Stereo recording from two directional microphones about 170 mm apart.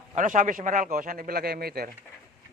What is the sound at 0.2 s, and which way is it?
Speech, 50° right (ahead or behind).